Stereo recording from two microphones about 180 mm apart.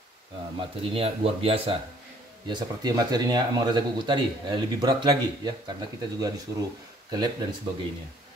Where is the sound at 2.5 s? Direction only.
20° right (ahead or behind).